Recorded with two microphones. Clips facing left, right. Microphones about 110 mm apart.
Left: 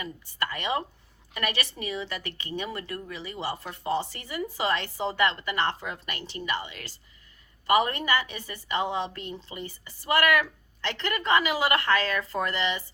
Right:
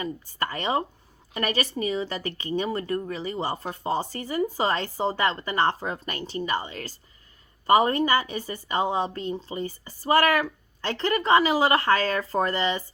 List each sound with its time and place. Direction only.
0.0 s a woman's voice: 35° right (ahead or behind)